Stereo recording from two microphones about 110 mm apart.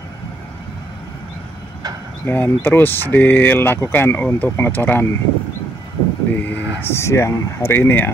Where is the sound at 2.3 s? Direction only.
20° left (ahead or behind).